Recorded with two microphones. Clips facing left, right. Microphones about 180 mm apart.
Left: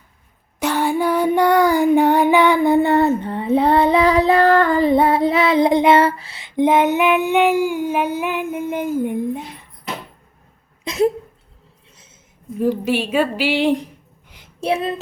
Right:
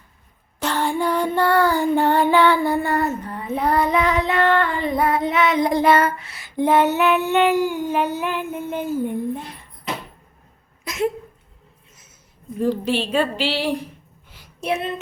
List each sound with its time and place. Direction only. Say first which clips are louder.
0.6 s child singing: left 3 dB; 10° left (ahead or behind); by 6.4 s 30° left (ahead or behind)
6.6 s child singing: left 2 dB; 15° left (ahead or behind)
10.8 s a sound: left 5 dB; 35° left (ahead or behind)
12.5 s child singing: left 2 dB; 10° left (ahead or behind)
14.3 s a sound: left 1 dB; 20° left (ahead or behind)
14.6 s speech: left 4 dB; 35° left (ahead or behind)